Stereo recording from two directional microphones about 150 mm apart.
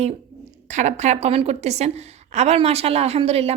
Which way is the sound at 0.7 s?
50° right (ahead or behind).